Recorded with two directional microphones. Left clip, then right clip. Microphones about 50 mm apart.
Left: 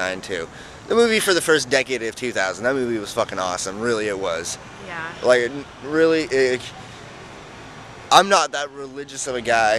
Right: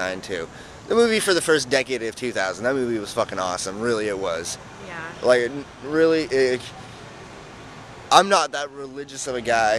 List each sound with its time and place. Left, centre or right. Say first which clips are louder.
0.0 s speech: left 2 dB; centre
4.8 s speech: left 4 dB; left
5.2 s speech: left 1 dB; centre
8.1 s speech: left 2 dB; centre